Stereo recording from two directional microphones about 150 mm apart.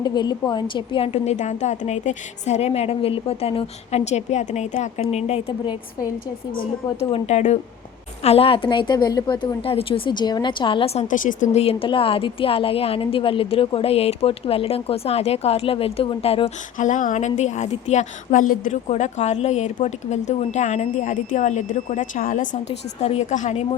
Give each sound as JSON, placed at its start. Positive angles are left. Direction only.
{"t": 0.0, "sound": "a woman's voice", "side_deg": 30}
{"t": 7.0, "sound": "a woman's voice", "side_deg": 45}
{"t": 11.1, "sound": "speech", "side_deg": 60}
{"t": 16.7, "sound": "a woman's voice", "side_deg": 55}
{"t": 23.0, "sound": "a woman's voice", "side_deg": 45}